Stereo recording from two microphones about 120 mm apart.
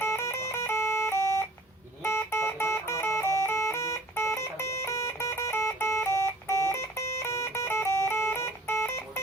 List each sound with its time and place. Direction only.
0.0 s music: 25° left (ahead or behind)